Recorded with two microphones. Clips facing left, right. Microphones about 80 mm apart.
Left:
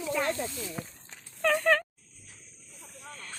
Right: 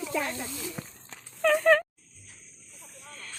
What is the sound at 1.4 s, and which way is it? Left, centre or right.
Speech, centre.